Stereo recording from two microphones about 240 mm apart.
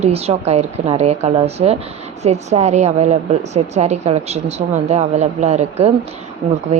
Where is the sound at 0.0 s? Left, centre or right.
Right.